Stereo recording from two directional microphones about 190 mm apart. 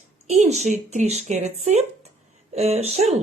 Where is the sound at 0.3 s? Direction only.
35° right (ahead or behind).